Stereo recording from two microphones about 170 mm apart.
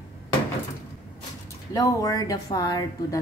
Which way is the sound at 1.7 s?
20° left (ahead or behind).